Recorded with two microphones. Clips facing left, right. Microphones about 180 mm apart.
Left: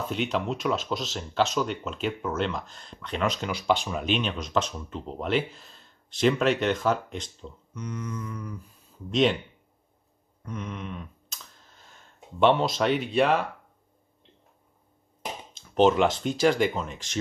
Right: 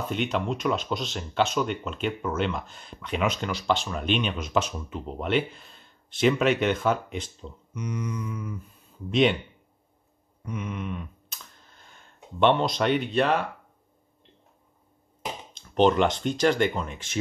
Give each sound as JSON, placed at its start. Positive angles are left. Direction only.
{"t": 0.1, "sound": "speech", "side_deg": 0}
{"t": 7.7, "sound": "mantra", "side_deg": -10}
{"t": 9.1, "sound": "speech", "side_deg": 0}
{"t": 10.4, "sound": "a sound", "side_deg": -5}
{"t": 15.5, "sound": "speech", "side_deg": 5}